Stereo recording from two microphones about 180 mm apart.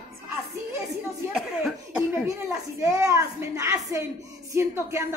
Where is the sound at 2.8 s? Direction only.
15° right (ahead or behind).